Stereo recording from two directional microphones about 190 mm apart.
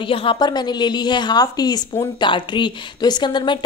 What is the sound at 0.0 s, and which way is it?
A woman's voice, 30° left (ahead or behind).